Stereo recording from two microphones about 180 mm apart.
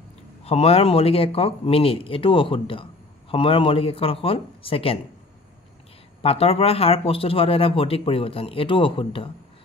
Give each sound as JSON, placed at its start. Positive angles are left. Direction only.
{"t": 0.4, "sound": "speech", "side_deg": 35}
{"t": 6.2, "sound": "speech", "side_deg": 35}